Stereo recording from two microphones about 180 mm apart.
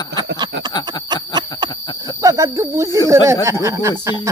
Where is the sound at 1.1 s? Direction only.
25° right (ahead or behind).